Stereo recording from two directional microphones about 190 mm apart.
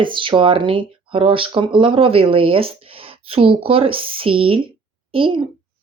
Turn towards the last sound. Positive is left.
turn(degrees=-25)  # may be behind; listen again after turning